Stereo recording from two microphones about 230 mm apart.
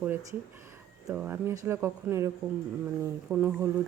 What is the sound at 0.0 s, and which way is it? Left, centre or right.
A woman's voice, centre.